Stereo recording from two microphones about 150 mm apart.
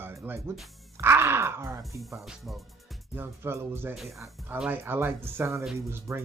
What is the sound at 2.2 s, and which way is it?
Speech, centre (ahead or behind).